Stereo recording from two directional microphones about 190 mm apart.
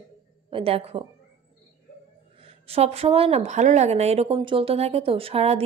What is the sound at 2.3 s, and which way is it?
A woman's voice, 30° right (ahead or behind).